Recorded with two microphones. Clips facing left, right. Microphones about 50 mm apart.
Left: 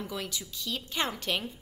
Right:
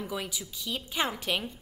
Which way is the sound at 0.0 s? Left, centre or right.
Centre.